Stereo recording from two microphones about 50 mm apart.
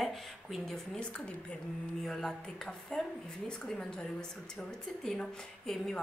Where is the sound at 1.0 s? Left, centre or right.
Left.